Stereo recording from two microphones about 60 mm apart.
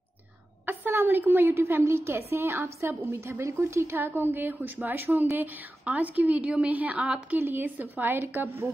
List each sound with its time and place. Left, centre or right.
0.7 s a sound: right
1.5 s a woman's voice: right; by 7.3 s centre
7.3 s speech: right